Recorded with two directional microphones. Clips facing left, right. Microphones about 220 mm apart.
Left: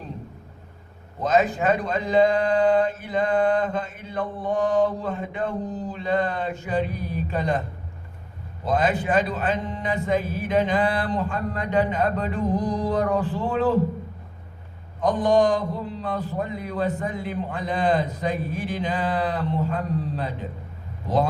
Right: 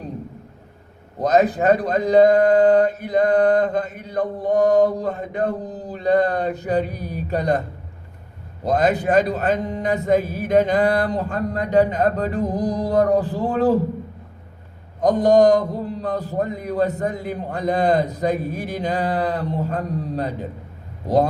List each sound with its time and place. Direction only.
1.2 s speech: 40° right (ahead or behind)
8.6 s speech: 40° right (ahead or behind)
15.0 s speech: 40° right (ahead or behind)